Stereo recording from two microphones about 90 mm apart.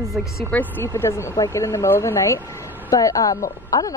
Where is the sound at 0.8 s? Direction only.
30° left (ahead or behind).